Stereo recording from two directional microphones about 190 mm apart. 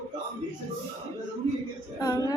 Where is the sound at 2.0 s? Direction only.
20° left (ahead or behind).